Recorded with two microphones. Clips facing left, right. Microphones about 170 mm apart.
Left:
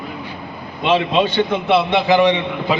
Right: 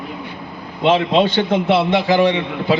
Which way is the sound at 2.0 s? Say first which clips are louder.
Left 1 dB; 20° left (ahead or behind).